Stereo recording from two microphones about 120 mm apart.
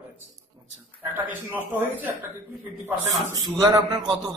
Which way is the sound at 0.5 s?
35° right (ahead or behind).